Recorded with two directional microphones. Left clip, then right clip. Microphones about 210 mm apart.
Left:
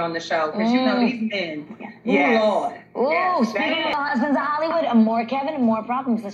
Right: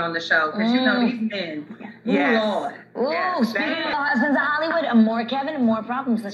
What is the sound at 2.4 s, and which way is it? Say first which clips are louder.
Speech: left 4 dB; 30° left (ahead or behind).